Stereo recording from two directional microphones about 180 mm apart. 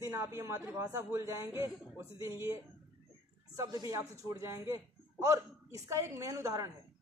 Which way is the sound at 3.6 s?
20° right (ahead or behind).